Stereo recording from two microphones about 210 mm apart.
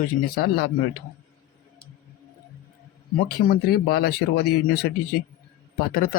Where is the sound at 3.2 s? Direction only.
45° left (ahead or behind).